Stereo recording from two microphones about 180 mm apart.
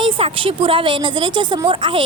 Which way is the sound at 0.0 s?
30° right (ahead or behind).